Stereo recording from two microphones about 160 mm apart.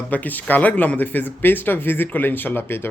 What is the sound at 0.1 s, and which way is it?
Speech, 10° left (ahead or behind).